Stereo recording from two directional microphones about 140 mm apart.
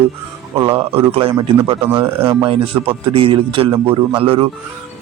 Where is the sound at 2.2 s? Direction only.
40° right (ahead or behind).